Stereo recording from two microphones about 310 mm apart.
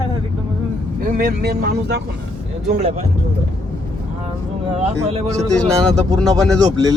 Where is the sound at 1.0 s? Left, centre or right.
Right.